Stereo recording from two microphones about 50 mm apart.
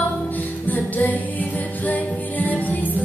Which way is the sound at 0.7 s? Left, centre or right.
Left.